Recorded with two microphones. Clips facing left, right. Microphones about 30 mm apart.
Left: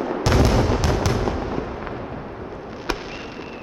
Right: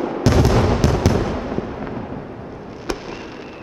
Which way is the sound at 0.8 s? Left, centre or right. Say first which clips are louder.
Right 4 dB; centre.